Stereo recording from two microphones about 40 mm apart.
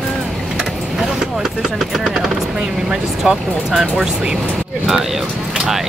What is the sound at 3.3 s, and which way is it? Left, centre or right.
Speech, centre.